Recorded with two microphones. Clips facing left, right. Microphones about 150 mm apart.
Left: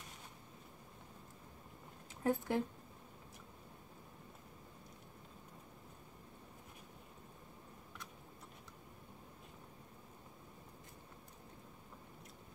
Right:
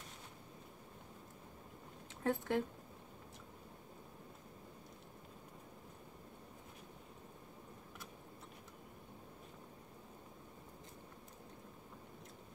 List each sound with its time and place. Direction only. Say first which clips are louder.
2.2 s speech: left 1 dB; 15° left (ahead or behind)